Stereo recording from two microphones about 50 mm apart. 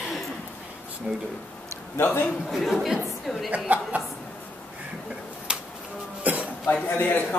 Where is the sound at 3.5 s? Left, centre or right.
Right.